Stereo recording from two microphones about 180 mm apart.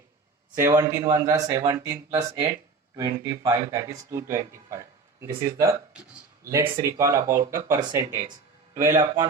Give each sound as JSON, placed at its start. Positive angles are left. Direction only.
{"t": 0.5, "sound": "speech", "side_deg": -15}
{"t": 6.9, "sound": "speech", "side_deg": -15}